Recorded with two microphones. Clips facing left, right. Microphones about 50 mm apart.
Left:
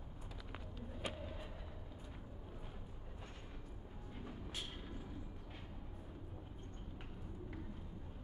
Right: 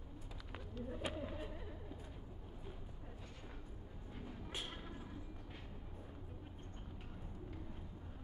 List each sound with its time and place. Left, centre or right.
0.5 s bird: centre